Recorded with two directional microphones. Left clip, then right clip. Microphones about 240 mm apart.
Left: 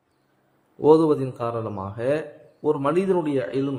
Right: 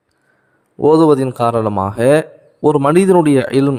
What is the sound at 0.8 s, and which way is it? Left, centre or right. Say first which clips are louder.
A man's voice: right 7 dB; right.